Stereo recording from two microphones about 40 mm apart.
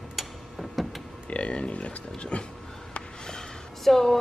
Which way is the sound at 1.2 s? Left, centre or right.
Left.